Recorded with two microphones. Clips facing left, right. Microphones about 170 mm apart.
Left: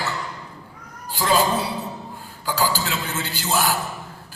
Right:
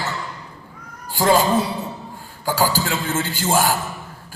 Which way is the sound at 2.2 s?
45° right (ahead or behind).